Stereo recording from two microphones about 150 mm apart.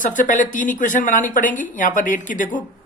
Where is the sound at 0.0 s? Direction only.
55° left (ahead or behind).